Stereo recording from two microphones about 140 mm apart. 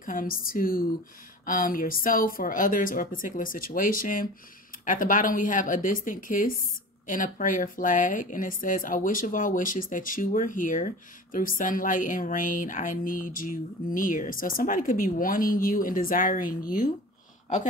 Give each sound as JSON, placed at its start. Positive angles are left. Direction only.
{"t": 0.0, "sound": "a woman's voice", "side_deg": 80}
{"t": 4.8, "sound": "a woman's voice", "side_deg": 75}